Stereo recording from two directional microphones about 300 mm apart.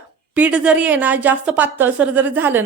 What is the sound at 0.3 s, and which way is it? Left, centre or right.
A woman's voice, centre.